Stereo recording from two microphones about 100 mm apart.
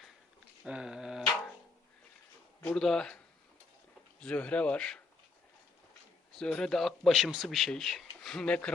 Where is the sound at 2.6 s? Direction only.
5° left (ahead or behind).